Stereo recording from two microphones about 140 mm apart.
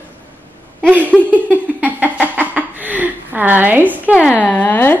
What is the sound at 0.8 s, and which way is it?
Speech, 10° right (ahead or behind).